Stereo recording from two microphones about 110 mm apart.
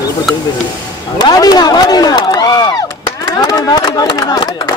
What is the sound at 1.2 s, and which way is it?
Speech, 40° left (ahead or behind).